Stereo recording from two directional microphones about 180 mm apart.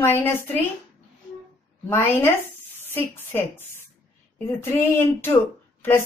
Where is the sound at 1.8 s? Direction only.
15° left (ahead or behind).